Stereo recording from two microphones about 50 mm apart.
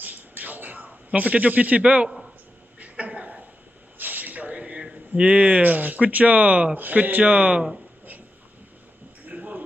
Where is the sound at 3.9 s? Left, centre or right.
Right.